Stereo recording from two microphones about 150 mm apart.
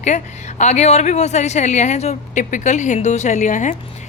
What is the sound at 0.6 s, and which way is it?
A woman's voice, 50° left (ahead or behind).